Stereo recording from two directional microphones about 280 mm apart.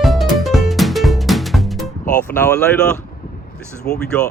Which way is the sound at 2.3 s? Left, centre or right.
Centre.